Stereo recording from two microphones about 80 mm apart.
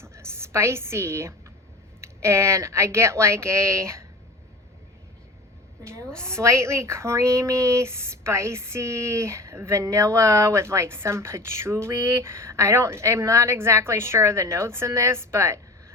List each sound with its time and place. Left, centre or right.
0.0 s a sound: right
2.0 s speech: right
5.8 s a woman's voice: right